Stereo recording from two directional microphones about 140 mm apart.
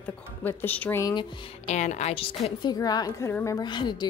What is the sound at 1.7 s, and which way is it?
Speech, 55° left (ahead or behind).